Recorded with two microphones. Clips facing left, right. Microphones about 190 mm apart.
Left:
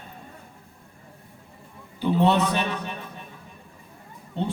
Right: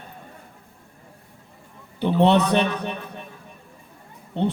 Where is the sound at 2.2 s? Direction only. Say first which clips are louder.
Right 5 dB; 65° right (ahead or behind).